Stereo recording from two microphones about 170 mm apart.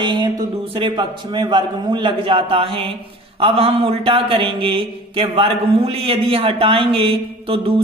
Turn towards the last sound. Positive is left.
turn(degrees=-30)  # may be behind; listen again after turning